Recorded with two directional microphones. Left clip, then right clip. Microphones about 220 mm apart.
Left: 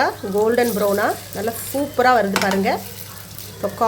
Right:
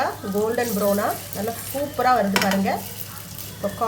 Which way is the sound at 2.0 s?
35° left (ahead or behind).